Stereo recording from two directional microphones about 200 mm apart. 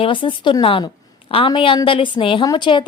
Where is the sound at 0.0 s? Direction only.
25° left (ahead or behind).